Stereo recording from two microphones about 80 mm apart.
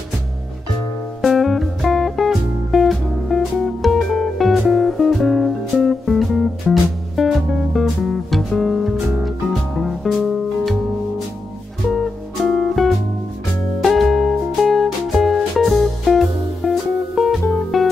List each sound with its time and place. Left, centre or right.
1.2 s music: centre
11.9 s music: centre